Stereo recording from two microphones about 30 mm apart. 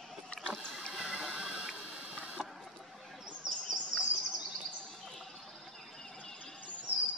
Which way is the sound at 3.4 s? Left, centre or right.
Centre.